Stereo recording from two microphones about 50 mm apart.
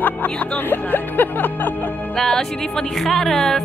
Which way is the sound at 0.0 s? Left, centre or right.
Left.